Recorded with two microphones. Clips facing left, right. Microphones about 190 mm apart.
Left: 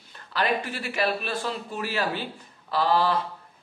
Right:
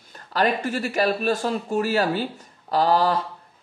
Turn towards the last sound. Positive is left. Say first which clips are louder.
# right 3 dB
turn(degrees=-40)  # may be behind; listen again after turning